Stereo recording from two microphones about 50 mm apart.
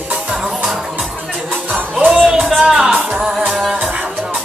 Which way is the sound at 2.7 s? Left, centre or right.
Centre.